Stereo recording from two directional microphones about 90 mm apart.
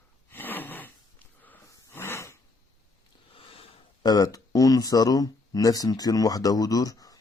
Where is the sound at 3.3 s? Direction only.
90° left.